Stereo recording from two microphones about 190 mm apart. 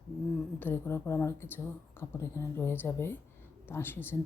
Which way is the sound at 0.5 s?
10° left (ahead or behind).